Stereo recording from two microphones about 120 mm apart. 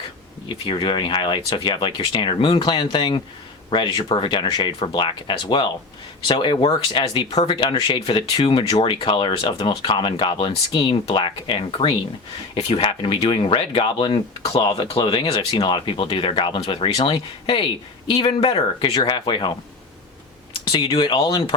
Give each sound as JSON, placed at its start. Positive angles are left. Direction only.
{"t": 0.4, "sound": "speech", "side_deg": 45}
{"t": 20.7, "sound": "speech", "side_deg": 45}